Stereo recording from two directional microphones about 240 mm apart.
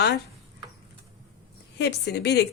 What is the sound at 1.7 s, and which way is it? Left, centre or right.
Speech, left.